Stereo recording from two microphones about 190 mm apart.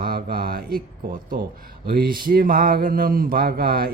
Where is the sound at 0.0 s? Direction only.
50° right (ahead or behind).